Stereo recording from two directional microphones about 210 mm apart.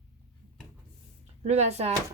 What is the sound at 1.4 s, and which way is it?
Speech, 30° right (ahead or behind).